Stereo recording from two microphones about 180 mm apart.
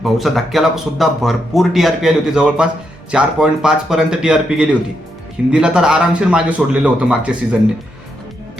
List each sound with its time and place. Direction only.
0.0 s speech: centre (ahead or behind)